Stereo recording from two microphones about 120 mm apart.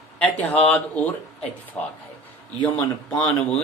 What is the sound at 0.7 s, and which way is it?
Speech, 15° left (ahead or behind).